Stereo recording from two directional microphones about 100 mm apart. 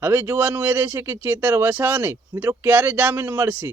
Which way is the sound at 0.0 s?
25° right (ahead or behind).